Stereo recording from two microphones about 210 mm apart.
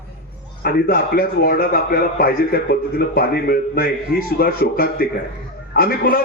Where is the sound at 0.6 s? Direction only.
45° left (ahead or behind).